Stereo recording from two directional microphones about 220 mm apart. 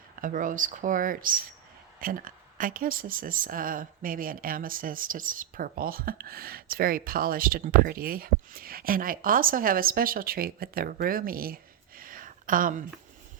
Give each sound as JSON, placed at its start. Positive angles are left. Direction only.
{"t": 0.2, "sound": "speech", "side_deg": -35}